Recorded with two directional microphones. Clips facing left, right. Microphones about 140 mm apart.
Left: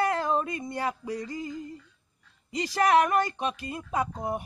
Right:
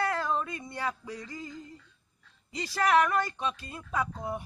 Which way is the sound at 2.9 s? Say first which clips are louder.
Left 1 dB; 20° left (ahead or behind).